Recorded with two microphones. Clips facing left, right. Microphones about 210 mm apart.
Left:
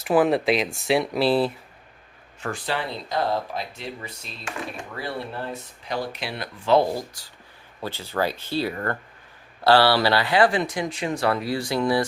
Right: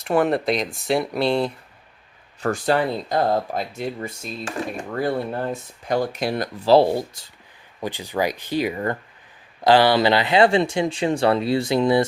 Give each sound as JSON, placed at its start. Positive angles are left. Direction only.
{"t": 0.0, "sound": "speech", "side_deg": 0}
{"t": 2.4, "sound": "speech", "side_deg": -45}